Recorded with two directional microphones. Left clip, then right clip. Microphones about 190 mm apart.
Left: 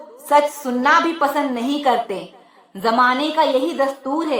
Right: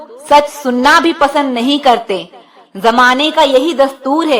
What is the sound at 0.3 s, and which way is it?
A woman's voice, 25° right (ahead or behind).